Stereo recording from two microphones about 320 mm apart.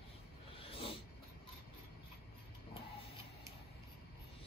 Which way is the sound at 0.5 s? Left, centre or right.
Centre.